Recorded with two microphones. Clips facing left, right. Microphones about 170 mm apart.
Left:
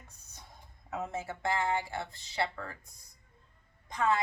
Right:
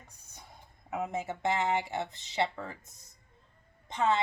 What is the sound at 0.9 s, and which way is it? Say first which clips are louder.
A woman's voice: right 3 dB; 15° right (ahead or behind).